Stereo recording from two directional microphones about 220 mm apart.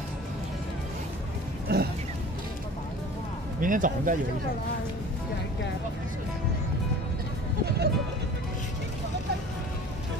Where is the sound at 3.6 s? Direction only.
35° right (ahead or behind).